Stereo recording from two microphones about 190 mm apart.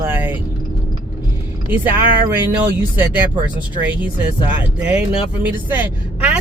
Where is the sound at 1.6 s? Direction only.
10° right (ahead or behind).